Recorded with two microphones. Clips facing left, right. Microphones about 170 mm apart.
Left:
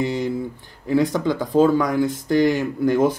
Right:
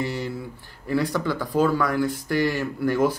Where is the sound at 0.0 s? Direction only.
20° left (ahead or behind).